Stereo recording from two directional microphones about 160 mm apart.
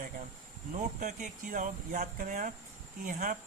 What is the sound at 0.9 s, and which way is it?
Speech, 55° right (ahead or behind).